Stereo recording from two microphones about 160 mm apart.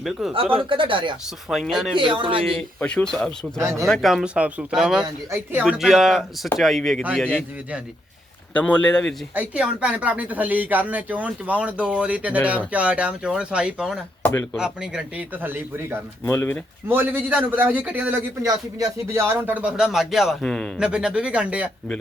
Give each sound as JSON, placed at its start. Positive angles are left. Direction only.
{"t": 0.0, "sound": "speech", "side_deg": 0}
{"t": 0.5, "sound": "speech", "side_deg": -30}
{"t": 1.5, "sound": "speech", "side_deg": 0}
{"t": 2.0, "sound": "speech", "side_deg": -30}
{"t": 2.5, "sound": "speech", "side_deg": 5}
{"t": 3.6, "sound": "speech", "side_deg": -20}
{"t": 3.8, "sound": "a man's voice", "side_deg": 0}
{"t": 5.6, "sound": "speech", "side_deg": 0}
{"t": 8.5, "sound": "speech", "side_deg": 10}
{"t": 9.3, "sound": "a man's voice", "side_deg": -10}
{"t": 16.2, "sound": "speech", "side_deg": 15}
{"t": 16.9, "sound": "a man's voice", "side_deg": -15}